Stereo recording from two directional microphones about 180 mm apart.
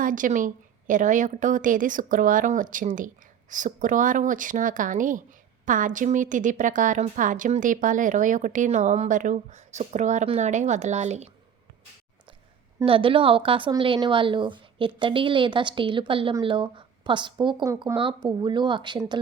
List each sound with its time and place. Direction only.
0.0 s a woman's voice: 50° right (ahead or behind)
12.8 s a woman's voice: 30° right (ahead or behind)